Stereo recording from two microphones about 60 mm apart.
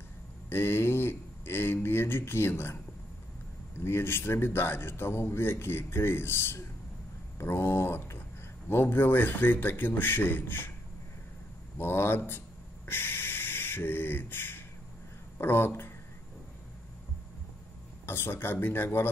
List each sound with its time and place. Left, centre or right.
0.5 s speech: left
3.8 s speech: left
11.8 s a sound: left
15.3 s speech: left
18.0 s speech: left